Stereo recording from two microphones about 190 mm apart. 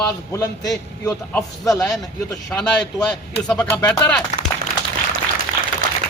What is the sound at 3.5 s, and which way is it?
Speech, 5° left (ahead or behind).